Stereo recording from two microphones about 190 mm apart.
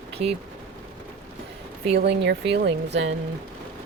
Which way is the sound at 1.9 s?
60° right (ahead or behind).